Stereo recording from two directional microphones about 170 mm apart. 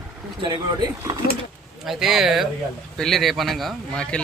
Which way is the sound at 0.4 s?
25° right (ahead or behind).